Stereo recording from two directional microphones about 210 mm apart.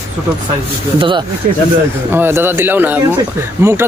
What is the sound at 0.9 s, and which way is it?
Speech, 25° right (ahead or behind).